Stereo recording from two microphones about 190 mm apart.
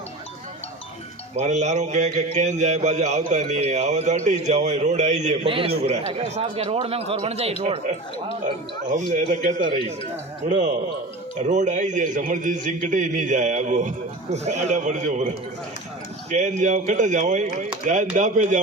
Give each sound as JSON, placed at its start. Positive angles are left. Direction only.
{"t": 1.4, "sound": "a man's voice", "side_deg": -35}
{"t": 8.4, "sound": "a man's voice", "side_deg": -40}
{"t": 9.6, "sound": "speech", "side_deg": -25}
{"t": 10.5, "sound": "a man's voice", "side_deg": -40}
{"t": 16.3, "sound": "a man's voice", "side_deg": -40}